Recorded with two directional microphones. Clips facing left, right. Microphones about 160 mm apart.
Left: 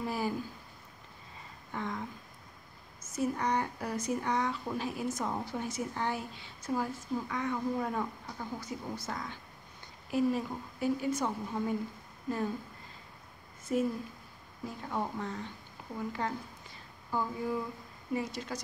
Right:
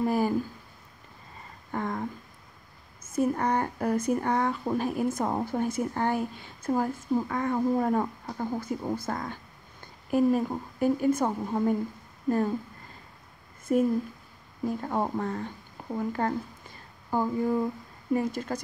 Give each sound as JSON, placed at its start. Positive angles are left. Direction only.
{"t": 0.0, "sound": "speech", "side_deg": -50}
{"t": 1.7, "sound": "a sound", "side_deg": -50}
{"t": 3.0, "sound": "speech", "side_deg": -55}
{"t": 13.7, "sound": "speech", "side_deg": -50}